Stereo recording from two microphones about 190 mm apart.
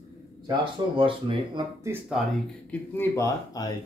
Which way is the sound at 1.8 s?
5° right (ahead or behind).